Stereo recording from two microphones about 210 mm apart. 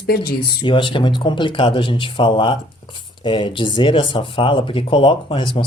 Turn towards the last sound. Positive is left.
turn(degrees=25)  # may be behind; listen again after turning